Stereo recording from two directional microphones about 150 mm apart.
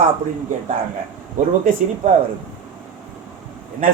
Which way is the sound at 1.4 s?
55° right (ahead or behind).